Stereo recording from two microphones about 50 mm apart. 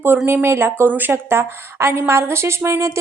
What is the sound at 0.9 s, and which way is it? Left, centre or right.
Speech, right.